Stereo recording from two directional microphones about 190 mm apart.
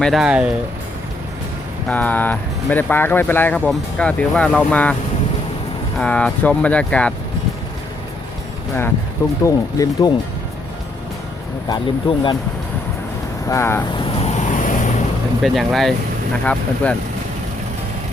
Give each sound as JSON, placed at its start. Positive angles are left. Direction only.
{"t": 0.0, "sound": "speech", "side_deg": 0}
{"t": 1.9, "sound": "speech", "side_deg": 10}
{"t": 6.0, "sound": "speech", "side_deg": 5}
{"t": 9.4, "sound": "speech", "side_deg": 15}
{"t": 11.7, "sound": "speech", "side_deg": 25}
{"t": 13.5, "sound": "speech", "side_deg": 15}
{"t": 13.9, "sound": "vehicle", "side_deg": 30}
{"t": 15.4, "sound": "speech", "side_deg": 0}